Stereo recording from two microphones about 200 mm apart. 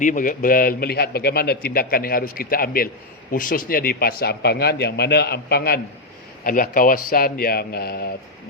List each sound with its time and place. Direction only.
0.0 s a man's voice: 40° left (ahead or behind)